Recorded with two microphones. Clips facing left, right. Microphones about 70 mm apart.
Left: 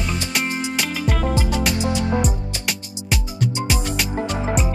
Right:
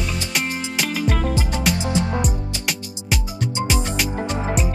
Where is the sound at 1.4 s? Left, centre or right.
Right.